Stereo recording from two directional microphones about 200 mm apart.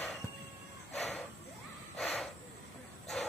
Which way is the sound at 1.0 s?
Centre (ahead or behind).